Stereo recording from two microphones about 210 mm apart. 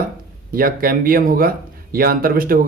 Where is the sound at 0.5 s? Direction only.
45° right (ahead or behind).